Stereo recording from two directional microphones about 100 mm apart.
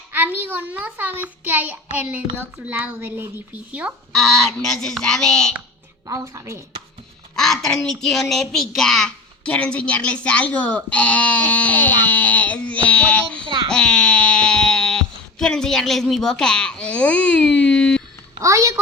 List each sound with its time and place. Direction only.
0.1 s a child's voice: 20° right (ahead or behind)
4.1 s speech: 5° left (ahead or behind)
6.1 s a woman's voice: 35° right (ahead or behind)
7.3 s speech: 5° left (ahead or behind)
18.3 s a woman's voice: 30° right (ahead or behind)